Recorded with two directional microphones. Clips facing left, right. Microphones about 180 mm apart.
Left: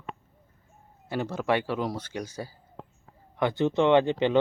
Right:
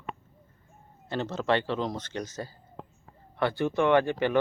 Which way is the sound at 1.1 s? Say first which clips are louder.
Even; 10° left (ahead or behind).